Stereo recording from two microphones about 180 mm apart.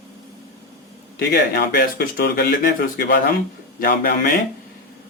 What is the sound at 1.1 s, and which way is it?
Speech, 60° left (ahead or behind).